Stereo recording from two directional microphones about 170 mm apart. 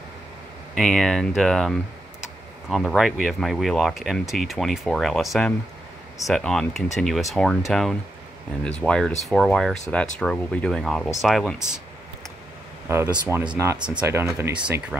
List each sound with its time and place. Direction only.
0.7 s speech: centre (ahead or behind)
12.8 s speech: 15° right (ahead or behind)
13.6 s speech: 20° right (ahead or behind)